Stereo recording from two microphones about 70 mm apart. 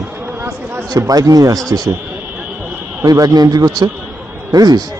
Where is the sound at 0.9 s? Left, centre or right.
Right.